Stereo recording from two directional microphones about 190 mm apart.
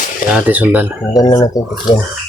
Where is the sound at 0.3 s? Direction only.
5° right (ahead or behind).